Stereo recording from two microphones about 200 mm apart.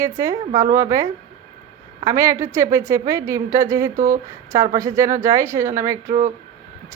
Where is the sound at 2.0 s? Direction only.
15° right (ahead or behind).